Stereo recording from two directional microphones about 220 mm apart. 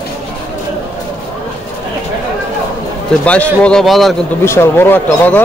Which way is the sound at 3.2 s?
5° left (ahead or behind).